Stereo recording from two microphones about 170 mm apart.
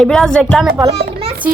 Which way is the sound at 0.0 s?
5° left (ahead or behind).